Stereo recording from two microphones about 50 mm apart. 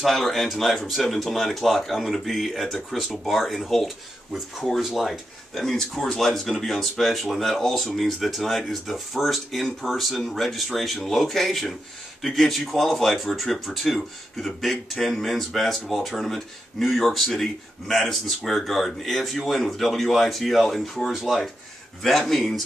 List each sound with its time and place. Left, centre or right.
0.0 s speech: centre
5.6 s speech: centre